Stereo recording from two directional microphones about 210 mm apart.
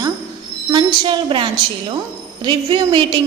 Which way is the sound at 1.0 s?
25° right (ahead or behind).